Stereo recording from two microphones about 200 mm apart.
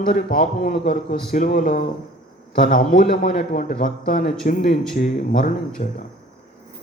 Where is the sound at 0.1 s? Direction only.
40° left (ahead or behind).